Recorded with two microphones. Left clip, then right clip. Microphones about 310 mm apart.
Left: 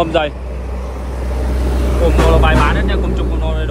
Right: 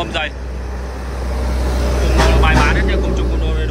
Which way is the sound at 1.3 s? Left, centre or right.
Right.